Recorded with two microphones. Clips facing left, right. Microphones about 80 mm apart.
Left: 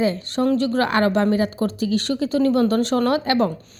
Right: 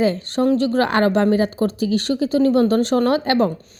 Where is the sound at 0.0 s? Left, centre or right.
Right.